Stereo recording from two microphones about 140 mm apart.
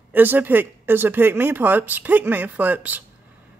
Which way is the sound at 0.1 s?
15° right (ahead or behind).